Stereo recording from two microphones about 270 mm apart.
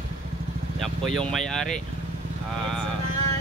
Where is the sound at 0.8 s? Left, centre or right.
Centre.